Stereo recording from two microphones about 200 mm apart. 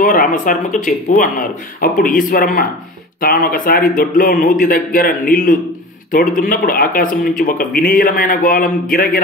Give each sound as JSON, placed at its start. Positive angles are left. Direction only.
{"t": 0.0, "sound": "speech", "side_deg": 45}